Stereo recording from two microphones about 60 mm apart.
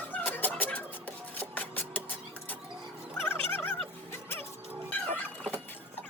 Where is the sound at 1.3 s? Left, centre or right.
Left.